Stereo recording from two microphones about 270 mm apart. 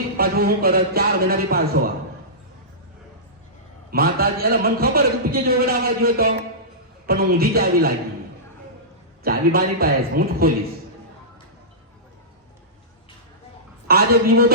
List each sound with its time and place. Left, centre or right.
0.2 s a man's voice: right
3.9 s a man's voice: right
9.2 s a man's voice: right
13.8 s a man's voice: right